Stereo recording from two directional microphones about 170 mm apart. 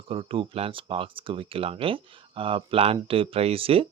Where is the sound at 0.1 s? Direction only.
30° right (ahead or behind).